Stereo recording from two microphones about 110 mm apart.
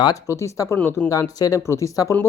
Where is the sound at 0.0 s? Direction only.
30° left (ahead or behind).